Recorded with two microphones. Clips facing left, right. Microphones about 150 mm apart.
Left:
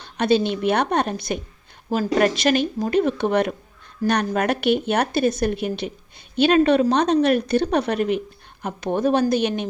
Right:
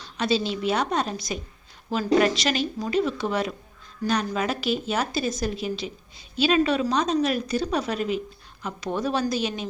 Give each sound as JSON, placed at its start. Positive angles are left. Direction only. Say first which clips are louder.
{"t": 0.0, "sound": "a woman's voice", "louder": "left 6 dB", "side_deg": 55}